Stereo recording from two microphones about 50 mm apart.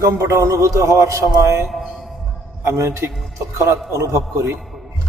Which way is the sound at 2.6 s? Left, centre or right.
Right.